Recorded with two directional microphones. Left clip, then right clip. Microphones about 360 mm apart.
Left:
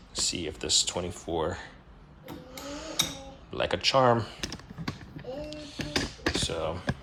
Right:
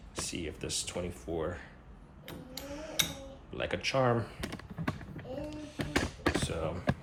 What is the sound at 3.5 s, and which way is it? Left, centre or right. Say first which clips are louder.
Speech: left 7 dB; centre.